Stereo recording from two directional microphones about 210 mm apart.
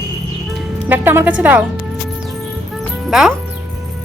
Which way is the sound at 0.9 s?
10° right (ahead or behind).